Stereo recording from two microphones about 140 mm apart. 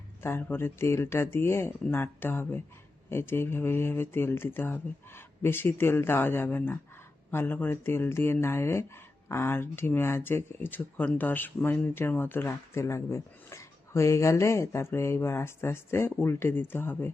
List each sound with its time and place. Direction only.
0.2 s speech: 15° left (ahead or behind)